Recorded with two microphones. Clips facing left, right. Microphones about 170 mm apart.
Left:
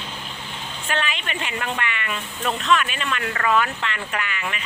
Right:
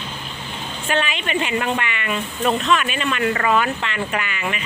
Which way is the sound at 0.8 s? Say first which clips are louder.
Right 4 dB; 15° right (ahead or behind).